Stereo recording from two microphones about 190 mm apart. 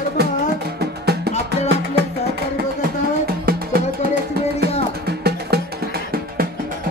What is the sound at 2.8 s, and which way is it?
Music, 50° right (ahead or behind).